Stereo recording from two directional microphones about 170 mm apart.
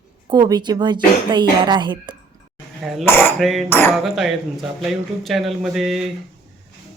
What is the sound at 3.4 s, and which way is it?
Speech, centre (ahead or behind).